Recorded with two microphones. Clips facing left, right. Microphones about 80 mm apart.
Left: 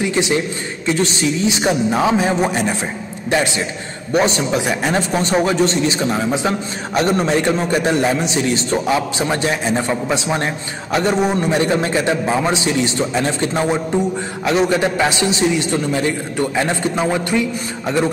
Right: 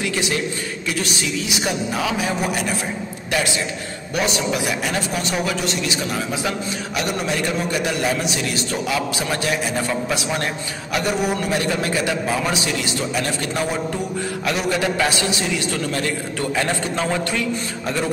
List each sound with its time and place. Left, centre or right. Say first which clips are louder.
0.0 s a man's voice: left 5 dB; left
4.1 s a man's voice: left 6 dB; left